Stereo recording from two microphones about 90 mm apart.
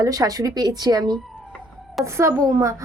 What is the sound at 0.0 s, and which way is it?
Speech, 40° right (ahead or behind).